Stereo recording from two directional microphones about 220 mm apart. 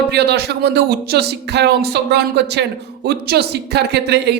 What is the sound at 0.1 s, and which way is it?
Speech, 50° right (ahead or behind).